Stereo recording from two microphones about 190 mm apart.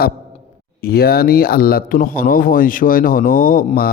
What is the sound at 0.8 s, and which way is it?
Speech, 55° left (ahead or behind).